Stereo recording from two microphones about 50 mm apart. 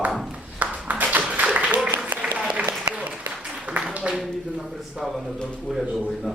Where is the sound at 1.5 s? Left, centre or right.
Right.